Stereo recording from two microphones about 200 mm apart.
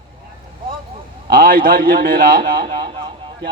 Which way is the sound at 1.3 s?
45° right (ahead or behind).